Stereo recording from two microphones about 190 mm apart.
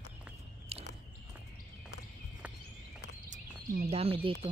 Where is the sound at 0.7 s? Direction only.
35° right (ahead or behind).